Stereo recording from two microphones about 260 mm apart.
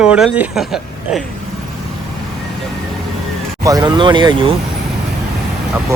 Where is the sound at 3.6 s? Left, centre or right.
Centre.